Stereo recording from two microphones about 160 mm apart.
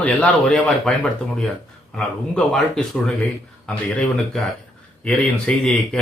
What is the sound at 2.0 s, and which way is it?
Speech, 5° left (ahead or behind).